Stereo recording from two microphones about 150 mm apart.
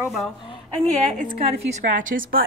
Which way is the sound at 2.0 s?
65° right (ahead or behind).